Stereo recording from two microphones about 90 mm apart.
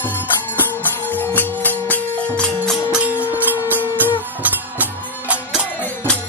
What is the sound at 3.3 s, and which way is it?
Music, 20° right (ahead or behind).